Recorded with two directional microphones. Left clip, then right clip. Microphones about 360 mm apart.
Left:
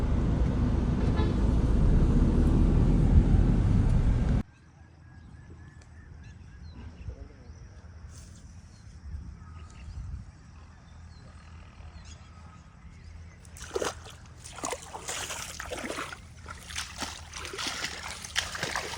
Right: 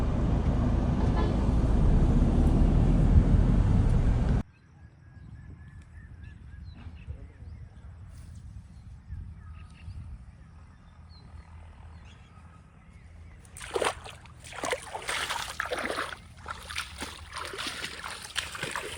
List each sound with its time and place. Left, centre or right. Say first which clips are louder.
0.0 s vehicle: right 1 dB; centre
13.6 s slosh: right 3 dB; centre
14.7 s a sound: right 6 dB; centre
16.6 s boat: left 2 dB; centre